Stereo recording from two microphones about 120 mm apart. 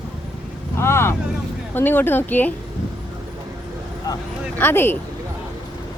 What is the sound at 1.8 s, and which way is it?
Speech, 15° left (ahead or behind).